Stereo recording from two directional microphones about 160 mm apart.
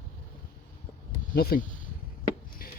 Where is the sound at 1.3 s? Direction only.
70° left (ahead or behind).